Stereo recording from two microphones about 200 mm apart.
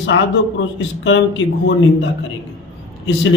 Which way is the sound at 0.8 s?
70° left (ahead or behind).